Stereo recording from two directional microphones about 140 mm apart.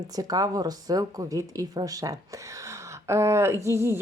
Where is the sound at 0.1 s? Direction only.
25° right (ahead or behind).